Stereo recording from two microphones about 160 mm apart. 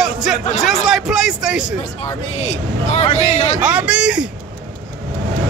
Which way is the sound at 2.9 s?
40° left (ahead or behind).